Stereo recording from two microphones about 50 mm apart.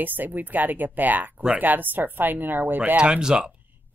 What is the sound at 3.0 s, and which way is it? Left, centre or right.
Speech, centre.